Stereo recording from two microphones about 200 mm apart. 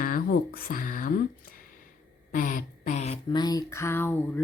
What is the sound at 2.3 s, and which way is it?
Speech, 40° left (ahead or behind).